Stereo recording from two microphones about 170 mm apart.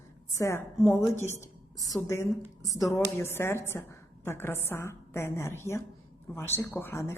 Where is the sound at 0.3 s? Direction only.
15° left (ahead or behind).